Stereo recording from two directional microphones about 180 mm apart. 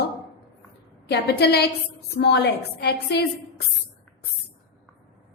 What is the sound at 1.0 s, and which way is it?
A woman's voice, 70° left (ahead or behind).